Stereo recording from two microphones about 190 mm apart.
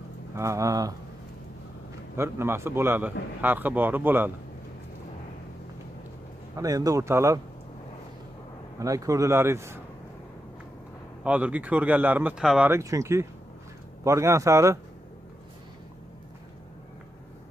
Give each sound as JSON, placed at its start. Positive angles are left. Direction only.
{"t": 0.4, "sound": "a man's voice", "side_deg": -15}
{"t": 2.1, "sound": "a man's voice", "side_deg": -15}
{"t": 6.5, "sound": "a man's voice", "side_deg": -20}
{"t": 8.7, "sound": "a man's voice", "side_deg": -15}
{"t": 11.2, "sound": "a man's voice", "side_deg": -10}